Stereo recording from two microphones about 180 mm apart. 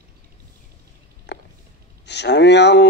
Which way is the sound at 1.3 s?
70° left (ahead or behind).